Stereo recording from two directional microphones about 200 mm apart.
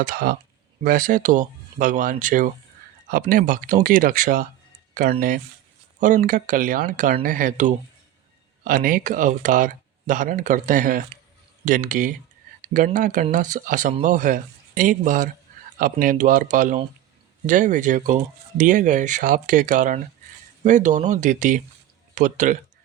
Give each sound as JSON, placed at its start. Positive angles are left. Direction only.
{"t": 0.0, "sound": "speech", "side_deg": -45}